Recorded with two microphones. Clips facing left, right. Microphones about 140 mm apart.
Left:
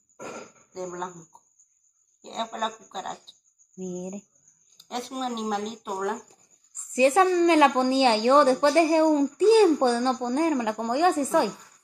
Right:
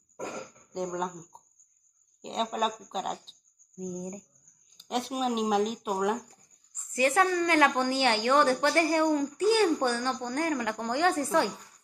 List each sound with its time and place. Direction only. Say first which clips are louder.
0.7 s speech: right 1 dB; 5° right (ahead or behind)
3.7 s speech: left 3 dB; 15° left (ahead or behind)
4.8 s speech: right 1 dB; 5° right (ahead or behind)
6.9 s a woman's voice: left 5 dB; 20° left (ahead or behind)